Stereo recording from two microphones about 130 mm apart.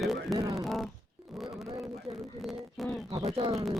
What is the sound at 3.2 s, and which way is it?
Speech, 45° right (ahead or behind).